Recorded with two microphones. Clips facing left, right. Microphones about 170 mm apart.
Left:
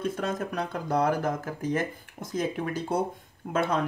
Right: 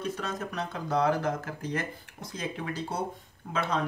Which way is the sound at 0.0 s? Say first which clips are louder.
Left 4 dB; 50° left (ahead or behind).